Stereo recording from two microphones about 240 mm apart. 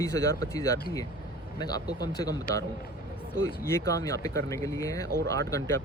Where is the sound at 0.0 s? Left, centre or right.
Centre.